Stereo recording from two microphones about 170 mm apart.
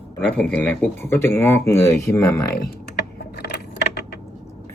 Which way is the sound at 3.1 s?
70° left (ahead or behind).